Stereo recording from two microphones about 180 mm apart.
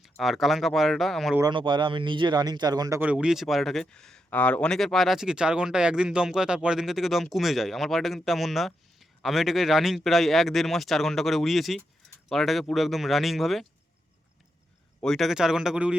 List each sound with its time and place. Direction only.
0.0 s speech: centre (ahead or behind)
1.4 s speech: 25° right (ahead or behind)
3.0 s speech: 5° right (ahead or behind)
15.0 s speech: centre (ahead or behind)